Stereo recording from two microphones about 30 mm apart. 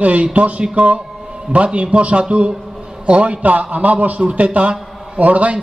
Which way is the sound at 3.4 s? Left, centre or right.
Right.